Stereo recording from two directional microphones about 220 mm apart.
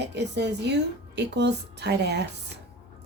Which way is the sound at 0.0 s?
50° right (ahead or behind).